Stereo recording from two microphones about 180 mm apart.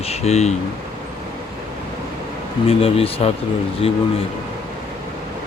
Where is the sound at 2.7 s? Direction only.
35° left (ahead or behind).